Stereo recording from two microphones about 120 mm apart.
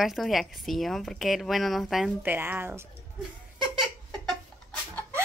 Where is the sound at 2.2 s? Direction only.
15° right (ahead or behind).